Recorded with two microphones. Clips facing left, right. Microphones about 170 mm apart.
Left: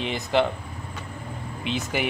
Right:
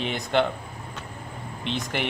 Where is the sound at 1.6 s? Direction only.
5° left (ahead or behind).